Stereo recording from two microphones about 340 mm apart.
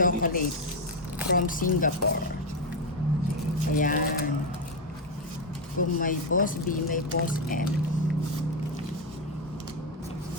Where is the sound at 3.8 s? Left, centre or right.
Left.